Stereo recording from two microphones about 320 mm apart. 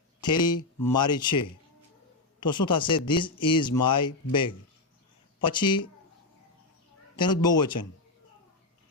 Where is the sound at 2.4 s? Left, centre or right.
Centre.